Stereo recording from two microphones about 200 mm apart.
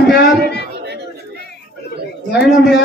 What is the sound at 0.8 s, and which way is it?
Chatter, 55° right (ahead or behind).